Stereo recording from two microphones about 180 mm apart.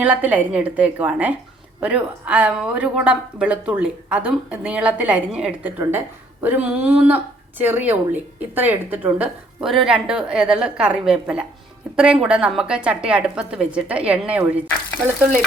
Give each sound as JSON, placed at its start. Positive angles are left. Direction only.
{"t": 0.0, "sound": "a woman's voice", "side_deg": -10}